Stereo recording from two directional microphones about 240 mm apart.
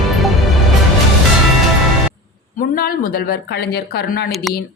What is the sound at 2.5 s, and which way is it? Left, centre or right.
A woman's voice, left.